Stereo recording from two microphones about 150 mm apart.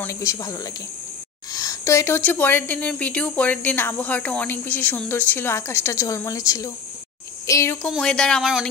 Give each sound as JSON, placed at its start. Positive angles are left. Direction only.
{"t": 0.0, "sound": "speech", "side_deg": 20}
{"t": 7.9, "sound": "speech", "side_deg": 5}